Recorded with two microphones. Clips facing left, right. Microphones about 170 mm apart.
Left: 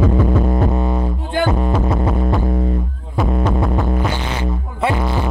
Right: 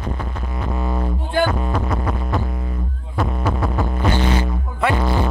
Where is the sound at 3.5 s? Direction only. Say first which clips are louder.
Left 3 dB; centre (ahead or behind).